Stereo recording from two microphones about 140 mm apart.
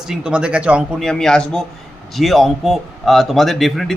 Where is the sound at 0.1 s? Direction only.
5° right (ahead or behind).